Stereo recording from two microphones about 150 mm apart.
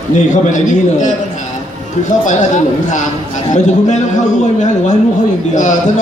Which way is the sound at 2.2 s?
55° left (ahead or behind).